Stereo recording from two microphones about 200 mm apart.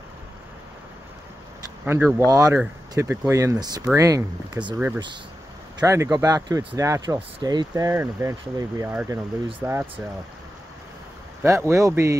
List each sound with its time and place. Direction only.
2.1 s speech: 15° right (ahead or behind)
11.4 s speech: 15° right (ahead or behind)